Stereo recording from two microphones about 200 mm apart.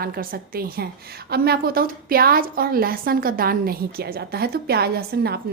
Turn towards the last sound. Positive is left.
turn(degrees=-50)  # may be behind; listen again after turning